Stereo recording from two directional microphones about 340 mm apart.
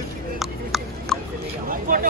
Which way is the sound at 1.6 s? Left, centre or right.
Right.